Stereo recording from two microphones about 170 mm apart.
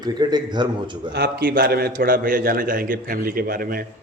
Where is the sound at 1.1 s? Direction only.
70° right (ahead or behind).